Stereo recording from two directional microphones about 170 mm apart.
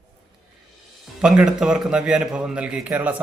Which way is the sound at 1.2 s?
5° right (ahead or behind).